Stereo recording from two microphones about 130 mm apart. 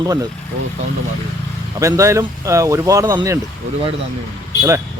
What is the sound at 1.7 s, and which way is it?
A man's voice, 25° right (ahead or behind).